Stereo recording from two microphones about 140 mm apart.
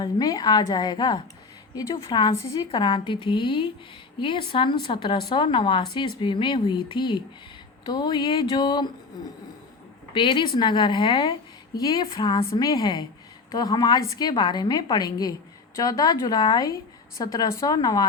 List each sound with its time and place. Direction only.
0.0 s a woman's voice: 30° left (ahead or behind)
10.2 s a woman's voice: 35° left (ahead or behind)